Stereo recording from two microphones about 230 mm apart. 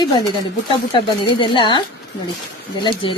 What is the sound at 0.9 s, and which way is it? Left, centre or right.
Speech, left.